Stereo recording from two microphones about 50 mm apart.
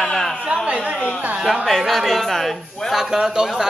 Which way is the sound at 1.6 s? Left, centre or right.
Centre.